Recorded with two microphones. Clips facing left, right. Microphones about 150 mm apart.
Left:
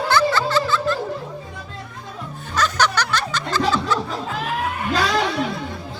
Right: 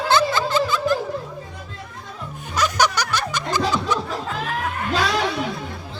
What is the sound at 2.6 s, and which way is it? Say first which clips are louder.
Music: even; 10° right (ahead or behind).